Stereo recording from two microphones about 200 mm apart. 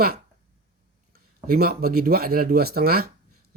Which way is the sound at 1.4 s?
50° right (ahead or behind).